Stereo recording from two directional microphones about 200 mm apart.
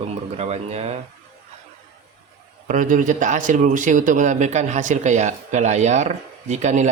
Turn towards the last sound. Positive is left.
turn(degrees=-35)  # may be behind; listen again after turning